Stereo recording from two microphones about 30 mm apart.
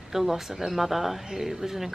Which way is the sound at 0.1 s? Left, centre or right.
Centre.